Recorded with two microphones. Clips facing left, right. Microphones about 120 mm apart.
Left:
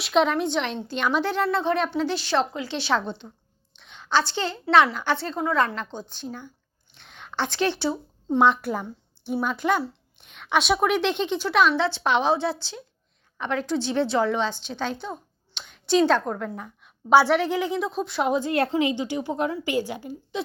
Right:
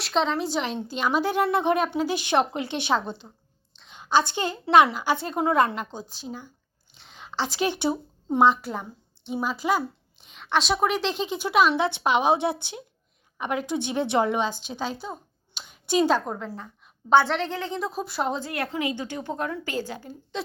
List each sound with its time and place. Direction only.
0.0 s a woman's voice: 5° left (ahead or behind); by 2.6 s 20° right (ahead or behind)
2.6 s a woman's voice: 55° right (ahead or behind)
2.8 s a woman's voice: 10° right (ahead or behind)
5.4 s a woman's voice: 25° right (ahead or behind)
5.7 s a woman's voice: 10° right (ahead or behind)
8.4 s a woman's voice: centre (ahead or behind)
15.0 s a sound: 5° right (ahead or behind)
16.8 s a woman's voice: 10° left (ahead or behind)
17.7 s speech: centre (ahead or behind)
18.2 s a woman's voice: 10° left (ahead or behind)
18.4 s a woman's voice: 30° left (ahead or behind)
19.0 s a woman's voice: 15° left (ahead or behind)